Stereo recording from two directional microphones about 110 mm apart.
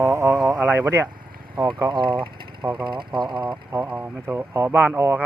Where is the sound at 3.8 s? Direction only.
15° right (ahead or behind).